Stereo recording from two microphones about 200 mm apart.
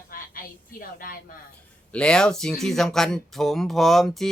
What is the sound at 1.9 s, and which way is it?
Speech, 5° left (ahead or behind).